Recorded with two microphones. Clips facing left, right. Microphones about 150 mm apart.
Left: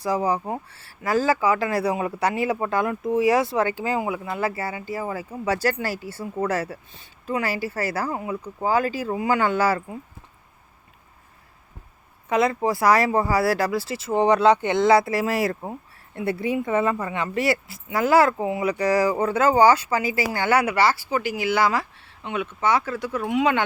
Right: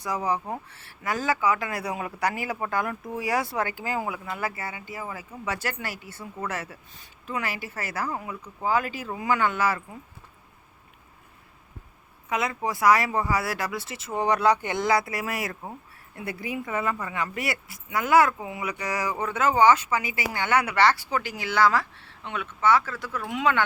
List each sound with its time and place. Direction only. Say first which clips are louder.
0.0 s speech: left 5 dB; 30° left (ahead or behind)
8.6 s speech: left 4 dB; 35° left (ahead or behind)
12.3 s speech: left 7 dB; 35° left (ahead or behind)
20.7 s speech: left 1 dB; 5° left (ahead or behind)